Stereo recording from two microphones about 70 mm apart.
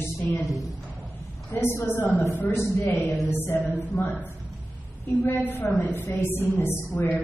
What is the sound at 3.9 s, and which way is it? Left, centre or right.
Mantra, left.